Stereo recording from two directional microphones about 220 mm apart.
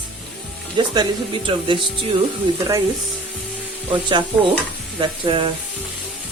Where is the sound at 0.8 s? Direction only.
20° right (ahead or behind).